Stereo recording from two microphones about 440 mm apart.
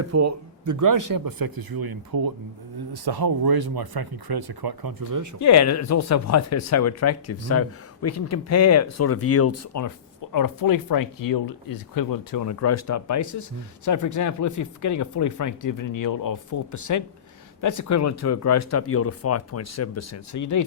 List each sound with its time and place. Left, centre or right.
0.0 s speech: right
5.4 s speech: left